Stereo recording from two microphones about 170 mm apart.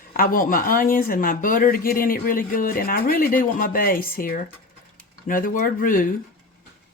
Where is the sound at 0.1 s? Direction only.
55° left (ahead or behind).